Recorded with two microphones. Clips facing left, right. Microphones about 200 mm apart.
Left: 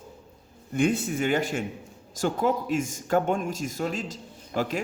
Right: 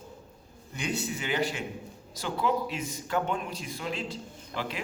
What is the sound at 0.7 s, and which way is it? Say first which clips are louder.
A man's voice: left 9 dB; 50° left (ahead or behind).